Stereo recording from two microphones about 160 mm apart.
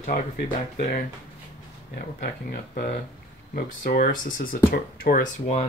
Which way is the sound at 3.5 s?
60° left (ahead or behind).